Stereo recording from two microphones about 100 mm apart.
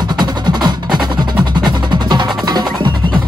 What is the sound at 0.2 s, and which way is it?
Music, 45° right (ahead or behind).